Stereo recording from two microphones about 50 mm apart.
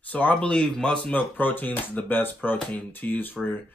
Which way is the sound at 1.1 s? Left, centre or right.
Left.